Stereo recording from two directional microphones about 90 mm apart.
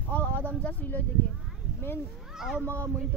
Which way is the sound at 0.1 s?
20° left (ahead or behind).